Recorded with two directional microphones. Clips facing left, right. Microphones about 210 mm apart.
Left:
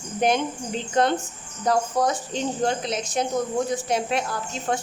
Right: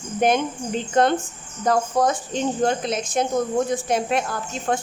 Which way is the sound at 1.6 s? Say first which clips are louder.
Right 2 dB; 50° right (ahead or behind).